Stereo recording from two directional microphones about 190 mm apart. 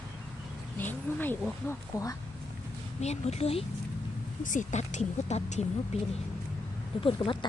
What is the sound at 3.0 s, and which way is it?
Speech, 35° left (ahead or behind).